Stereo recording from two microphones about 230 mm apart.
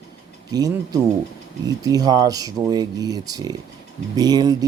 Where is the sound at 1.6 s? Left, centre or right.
Centre.